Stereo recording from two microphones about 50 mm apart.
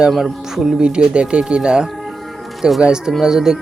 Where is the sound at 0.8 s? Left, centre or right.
Centre.